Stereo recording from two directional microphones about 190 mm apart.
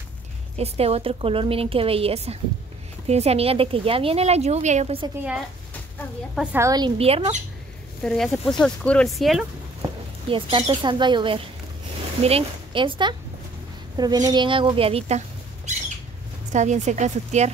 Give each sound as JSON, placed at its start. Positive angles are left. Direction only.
{"t": 0.6, "sound": "a woman's voice", "side_deg": -30}
{"t": 6.3, "sound": "a woman's voice", "side_deg": -10}
{"t": 7.0, "sound": "speech", "side_deg": -30}
{"t": 8.0, "sound": "speech", "side_deg": 5}
{"t": 10.3, "sound": "a woman's voice", "side_deg": -25}